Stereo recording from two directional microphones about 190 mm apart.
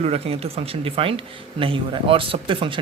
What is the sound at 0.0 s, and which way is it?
Speech, 30° right (ahead or behind).